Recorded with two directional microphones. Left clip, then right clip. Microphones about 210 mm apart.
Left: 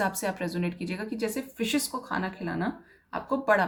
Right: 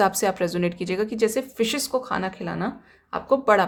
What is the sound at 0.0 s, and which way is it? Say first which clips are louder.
Speech: right 8 dB; 45° right (ahead or behind).